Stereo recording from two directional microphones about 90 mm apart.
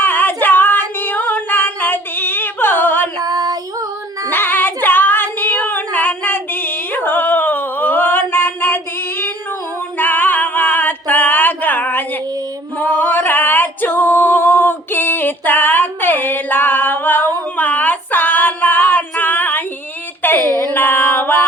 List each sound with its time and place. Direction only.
0.0 s female singing: 20° left (ahead or behind)
3.2 s child singing: 45° right (ahead or behind)
4.3 s female singing: 20° left (ahead or behind)
10.0 s music: 20° left (ahead or behind)
12.7 s female singing: 20° left (ahead or behind)
20.2 s a sound: 25° left (ahead or behind)
20.7 s female singing: 25° left (ahead or behind)